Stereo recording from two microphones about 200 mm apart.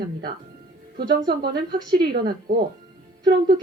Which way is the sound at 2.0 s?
50° right (ahead or behind).